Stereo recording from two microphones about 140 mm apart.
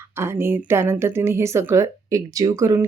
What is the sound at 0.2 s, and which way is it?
Speech, 15° right (ahead or behind).